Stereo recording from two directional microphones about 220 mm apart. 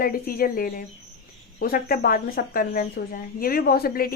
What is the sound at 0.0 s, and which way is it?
A woman's voice, 40° left (ahead or behind).